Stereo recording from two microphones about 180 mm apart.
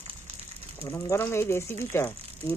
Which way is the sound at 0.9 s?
15° left (ahead or behind).